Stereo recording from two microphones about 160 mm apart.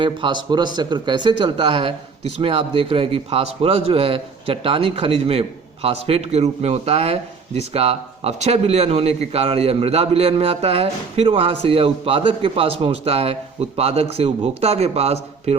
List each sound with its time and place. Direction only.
0.0 s a man's voice: 30° right (ahead or behind)